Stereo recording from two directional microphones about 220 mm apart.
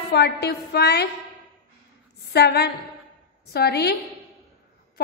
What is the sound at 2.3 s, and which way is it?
A woman's voice, 45° left (ahead or behind).